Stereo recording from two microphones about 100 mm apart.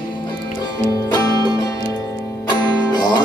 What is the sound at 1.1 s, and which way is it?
Music, 40° left (ahead or behind).